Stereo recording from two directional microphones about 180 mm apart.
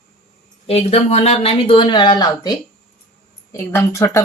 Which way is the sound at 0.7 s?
35° left (ahead or behind).